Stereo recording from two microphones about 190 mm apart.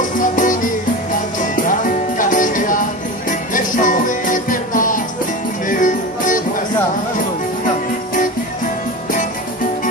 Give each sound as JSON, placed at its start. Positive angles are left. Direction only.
{"t": 0.2, "sound": "music", "side_deg": 45}